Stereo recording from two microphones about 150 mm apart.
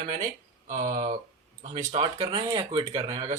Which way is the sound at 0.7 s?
60° right (ahead or behind).